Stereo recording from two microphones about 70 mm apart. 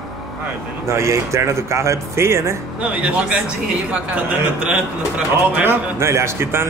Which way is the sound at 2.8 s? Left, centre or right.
Centre.